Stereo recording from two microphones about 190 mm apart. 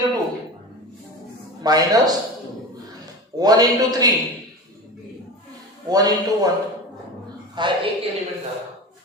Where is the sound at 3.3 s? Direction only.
20° right (ahead or behind).